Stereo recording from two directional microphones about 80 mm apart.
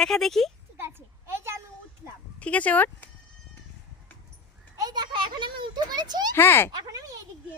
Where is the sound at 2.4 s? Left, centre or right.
Centre.